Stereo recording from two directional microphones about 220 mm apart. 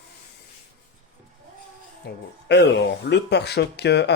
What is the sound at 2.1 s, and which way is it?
Speech, 50° left (ahead or behind).